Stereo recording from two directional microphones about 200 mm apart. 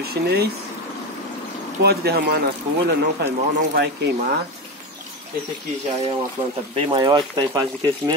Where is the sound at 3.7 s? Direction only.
55° right (ahead or behind).